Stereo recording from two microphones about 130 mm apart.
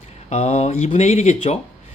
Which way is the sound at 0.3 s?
55° left (ahead or behind).